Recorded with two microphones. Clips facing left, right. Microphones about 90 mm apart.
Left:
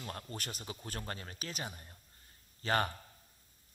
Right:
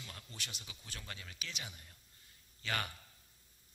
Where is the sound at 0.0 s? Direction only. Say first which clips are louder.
Left 8 dB; 45° left (ahead or behind).